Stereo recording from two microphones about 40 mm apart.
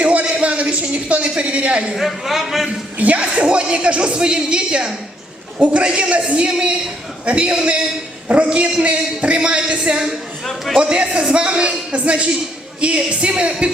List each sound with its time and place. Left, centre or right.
0.0 s a sound: right
0.4 s a woman's voice: right
1.9 s speech: centre
3.0 s a man's voice: right
10.4 s a man's voice: centre
10.8 s speech: right